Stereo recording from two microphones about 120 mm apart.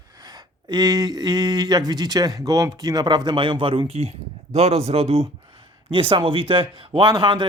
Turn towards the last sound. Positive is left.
turn(degrees=-40)  # may be behind; listen again after turning